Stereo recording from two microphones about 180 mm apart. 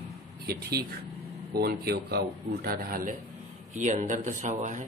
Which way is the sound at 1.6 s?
60° right (ahead or behind).